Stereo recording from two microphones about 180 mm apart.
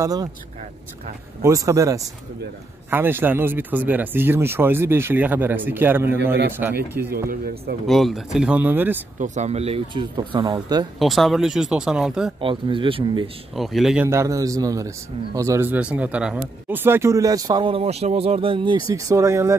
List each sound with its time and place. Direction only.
0.0 s speech: 20° right (ahead or behind)
1.4 s speech: 15° right (ahead or behind)
7.2 s a man's voice: 55° right (ahead or behind)
7.8 s speech: centre (ahead or behind)
9.2 s speech: 40° right (ahead or behind); by 10.9 s 20° right (ahead or behind)
11.0 s speech: centre (ahead or behind)
12.4 s speech: 30° right (ahead or behind)
13.6 s speech: centre (ahead or behind)
14.0 s speech: 15° right (ahead or behind)
18.9 s speech: 20° right (ahead or behind)